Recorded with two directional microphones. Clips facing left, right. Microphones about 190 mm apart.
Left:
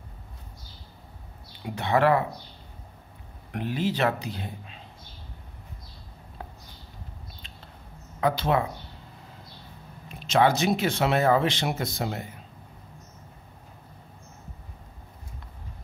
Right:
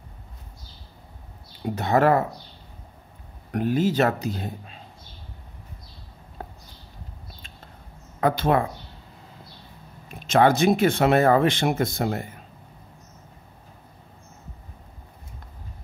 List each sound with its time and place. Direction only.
1.8 s speech: 40° right (ahead or behind)
3.5 s speech: 45° right (ahead or behind)
6.4 s a sound: 45° right (ahead or behind)
8.2 s speech: 50° right (ahead or behind)
10.0 s speech: 50° right (ahead or behind)